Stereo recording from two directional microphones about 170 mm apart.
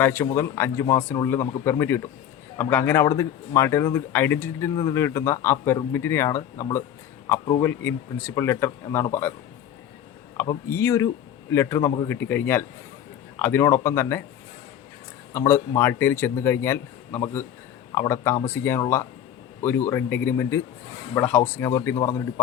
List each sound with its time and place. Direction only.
0.0 s speech: 15° left (ahead or behind)
10.3 s speech: 15° left (ahead or behind)
15.3 s speech: 15° left (ahead or behind)